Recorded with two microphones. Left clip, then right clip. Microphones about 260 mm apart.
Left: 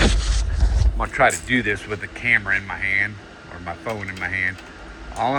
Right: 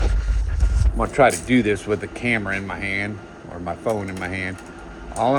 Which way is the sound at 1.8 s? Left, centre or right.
Right.